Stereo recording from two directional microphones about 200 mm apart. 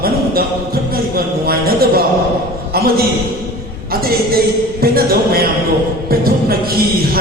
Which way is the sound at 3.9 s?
50° right (ahead or behind).